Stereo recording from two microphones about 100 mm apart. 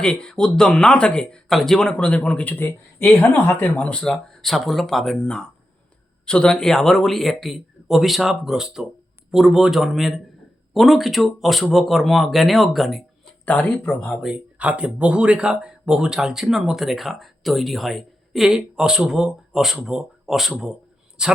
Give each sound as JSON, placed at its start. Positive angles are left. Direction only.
{"t": 0.0, "sound": "speech", "side_deg": 10}
{"t": 3.8, "sound": "speech", "side_deg": 10}
{"t": 13.4, "sound": "speech", "side_deg": 15}
{"t": 14.6, "sound": "a man's voice", "side_deg": -10}